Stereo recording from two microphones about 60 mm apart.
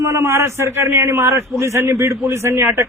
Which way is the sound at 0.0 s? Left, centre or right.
Right.